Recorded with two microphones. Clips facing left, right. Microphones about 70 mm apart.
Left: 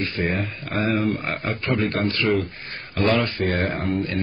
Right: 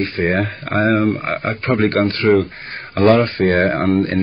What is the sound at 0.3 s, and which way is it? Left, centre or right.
Speech, right.